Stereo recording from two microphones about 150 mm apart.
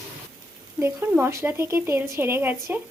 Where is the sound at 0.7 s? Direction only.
15° right (ahead or behind).